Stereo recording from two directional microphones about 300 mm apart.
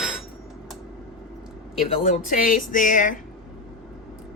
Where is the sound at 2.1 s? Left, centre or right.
Left.